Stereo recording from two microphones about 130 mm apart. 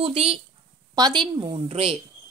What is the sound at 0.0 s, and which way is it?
Speech, 50° right (ahead or behind).